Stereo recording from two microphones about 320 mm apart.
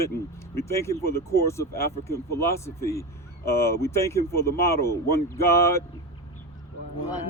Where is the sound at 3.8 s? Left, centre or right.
Centre.